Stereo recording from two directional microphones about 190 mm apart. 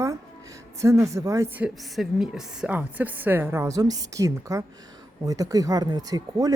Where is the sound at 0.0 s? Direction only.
15° right (ahead or behind).